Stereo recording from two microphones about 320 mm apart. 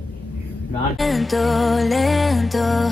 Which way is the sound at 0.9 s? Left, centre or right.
Centre.